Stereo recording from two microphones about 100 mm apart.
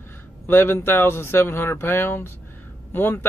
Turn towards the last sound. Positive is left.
turn(degrees=20)  # may be behind; listen again after turning